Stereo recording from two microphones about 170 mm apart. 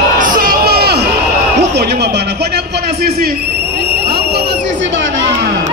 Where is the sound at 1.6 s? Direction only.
80° right.